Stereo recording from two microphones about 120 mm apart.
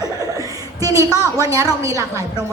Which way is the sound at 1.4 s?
30° right (ahead or behind).